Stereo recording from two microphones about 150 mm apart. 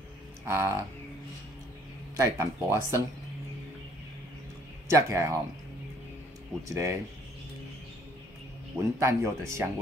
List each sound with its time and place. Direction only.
0.5 s speech: 20° right (ahead or behind)
2.1 s speech: 20° right (ahead or behind)
4.8 s speech: 20° right (ahead or behind)
6.7 s speech: 20° right (ahead or behind)
9.0 s speech: 20° right (ahead or behind)